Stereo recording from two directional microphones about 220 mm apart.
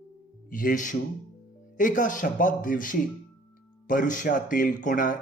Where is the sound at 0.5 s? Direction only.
35° left (ahead or behind).